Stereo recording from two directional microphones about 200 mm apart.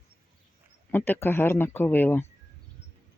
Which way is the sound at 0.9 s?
10° left (ahead or behind).